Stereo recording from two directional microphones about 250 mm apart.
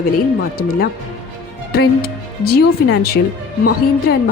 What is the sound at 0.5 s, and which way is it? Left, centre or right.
A woman's voice, left.